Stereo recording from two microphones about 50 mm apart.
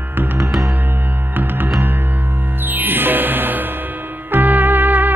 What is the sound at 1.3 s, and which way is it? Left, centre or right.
Music, right.